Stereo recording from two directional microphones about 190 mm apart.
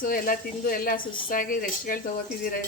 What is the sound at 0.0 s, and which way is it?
A woman's voice, 45° left (ahead or behind).